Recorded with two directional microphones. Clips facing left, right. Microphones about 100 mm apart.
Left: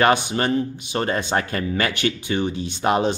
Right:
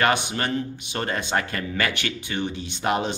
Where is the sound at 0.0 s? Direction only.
25° left (ahead or behind).